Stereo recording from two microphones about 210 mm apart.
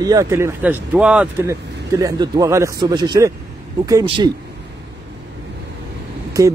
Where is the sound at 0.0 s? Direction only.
15° right (ahead or behind).